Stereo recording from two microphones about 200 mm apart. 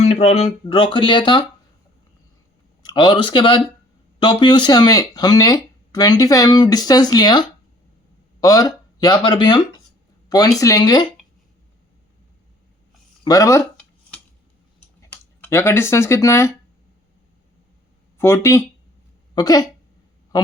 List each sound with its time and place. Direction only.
0.0 s speech: 30° left (ahead or behind)
2.8 s speech: 25° left (ahead or behind)
13.2 s speech: 15° left (ahead or behind)
15.0 s speech: 10° left (ahead or behind)
18.2 s speech: 15° left (ahead or behind)